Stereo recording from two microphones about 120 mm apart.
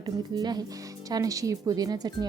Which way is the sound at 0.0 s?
35° right (ahead or behind).